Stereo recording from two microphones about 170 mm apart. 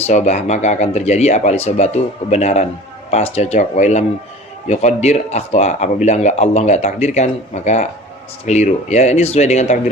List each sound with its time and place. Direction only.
0.1 s speech: 40° left (ahead or behind)